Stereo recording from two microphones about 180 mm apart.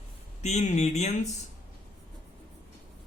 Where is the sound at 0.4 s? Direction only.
40° left (ahead or behind).